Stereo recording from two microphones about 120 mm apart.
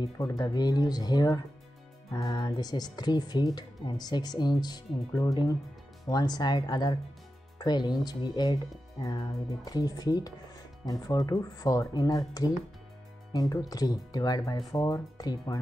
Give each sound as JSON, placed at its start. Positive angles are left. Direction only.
{"t": 0.2, "sound": "speech", "side_deg": 30}
{"t": 13.3, "sound": "speech", "side_deg": 30}